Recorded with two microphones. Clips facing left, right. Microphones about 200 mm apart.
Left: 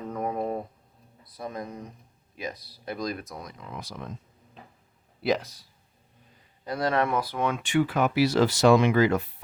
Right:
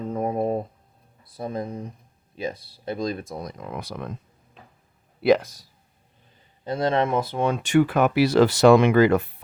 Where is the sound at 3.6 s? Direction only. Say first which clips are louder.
Right 6 dB; 60° right (ahead or behind).